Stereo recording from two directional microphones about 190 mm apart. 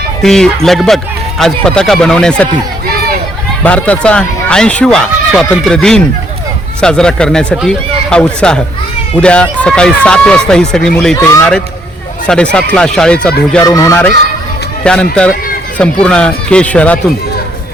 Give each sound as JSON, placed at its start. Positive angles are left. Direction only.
{"t": 0.2, "sound": "speech", "side_deg": 0}
{"t": 3.6, "sound": "speech", "side_deg": 5}
{"t": 11.2, "sound": "speech", "side_deg": 15}
{"t": 13.7, "sound": "speech", "side_deg": 15}